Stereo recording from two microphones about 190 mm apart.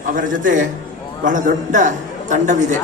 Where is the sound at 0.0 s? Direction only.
45° right (ahead or behind).